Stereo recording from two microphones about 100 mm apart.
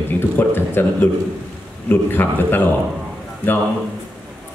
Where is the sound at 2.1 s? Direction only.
20° left (ahead or behind).